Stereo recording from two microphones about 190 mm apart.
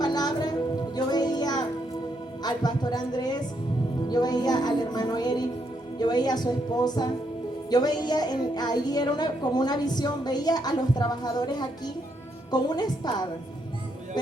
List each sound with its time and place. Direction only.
0.0 s music: 20° left (ahead or behind)
2.4 s a woman's voice: 20° left (ahead or behind)